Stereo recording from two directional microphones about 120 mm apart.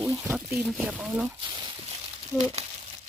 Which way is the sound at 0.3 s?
15° right (ahead or behind).